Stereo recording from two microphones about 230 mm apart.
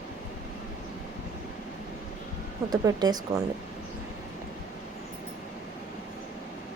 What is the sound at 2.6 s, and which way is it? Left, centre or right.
Speech, centre.